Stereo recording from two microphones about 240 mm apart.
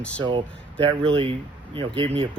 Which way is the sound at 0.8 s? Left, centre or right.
Right.